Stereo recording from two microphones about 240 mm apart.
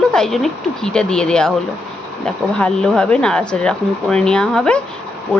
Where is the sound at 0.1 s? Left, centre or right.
Centre.